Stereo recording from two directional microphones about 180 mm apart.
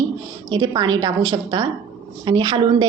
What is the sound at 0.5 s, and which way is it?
A woman's voice, 25° right (ahead or behind).